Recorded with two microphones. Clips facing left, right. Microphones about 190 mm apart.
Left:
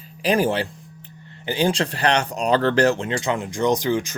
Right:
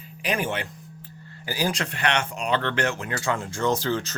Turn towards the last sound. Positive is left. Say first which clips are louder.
# left 4 dB
turn(degrees=15)  # may be behind; listen again after turning